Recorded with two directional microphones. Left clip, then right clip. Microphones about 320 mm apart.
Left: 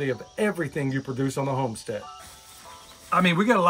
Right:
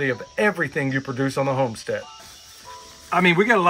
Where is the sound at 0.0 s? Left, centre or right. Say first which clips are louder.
Right 5 dB; centre.